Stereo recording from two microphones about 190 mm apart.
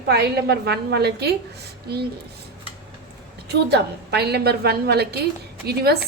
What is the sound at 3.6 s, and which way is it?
A woman's voice, 60° right (ahead or behind).